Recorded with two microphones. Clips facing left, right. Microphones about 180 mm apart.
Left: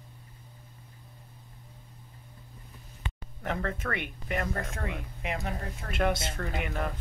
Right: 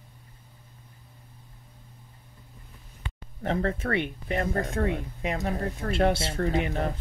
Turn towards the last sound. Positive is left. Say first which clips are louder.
# right 6 dB
turn(degrees=-35)  # may be behind; listen again after turning